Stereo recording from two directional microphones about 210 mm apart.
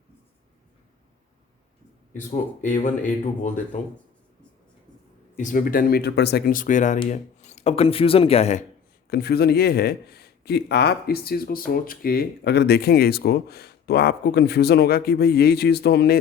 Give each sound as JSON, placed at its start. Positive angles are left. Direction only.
{"t": 2.1, "sound": "speech", "side_deg": 35}
{"t": 5.4, "sound": "speech", "side_deg": 40}
{"t": 9.0, "sound": "speech", "side_deg": 50}